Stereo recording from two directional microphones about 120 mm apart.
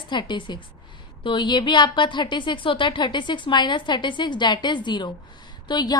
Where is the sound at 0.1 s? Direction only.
40° left (ahead or behind).